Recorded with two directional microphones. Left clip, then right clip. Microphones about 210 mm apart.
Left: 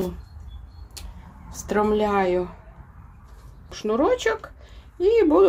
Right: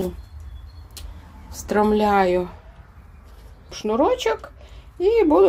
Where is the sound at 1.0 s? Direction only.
Centre (ahead or behind).